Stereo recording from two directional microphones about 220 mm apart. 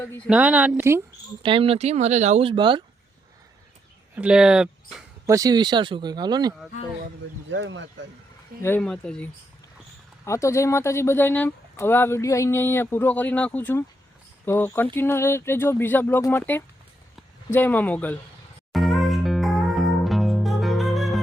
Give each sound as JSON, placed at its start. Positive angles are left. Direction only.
{"t": 0.3, "sound": "speech", "side_deg": -5}
{"t": 1.4, "sound": "speech", "side_deg": -25}
{"t": 4.1, "sound": "speech", "side_deg": -5}
{"t": 5.2, "sound": "speech", "side_deg": -15}
{"t": 7.5, "sound": "speech", "side_deg": -55}
{"t": 8.6, "sound": "speech", "side_deg": 5}
{"t": 18.7, "sound": "music", "side_deg": 0}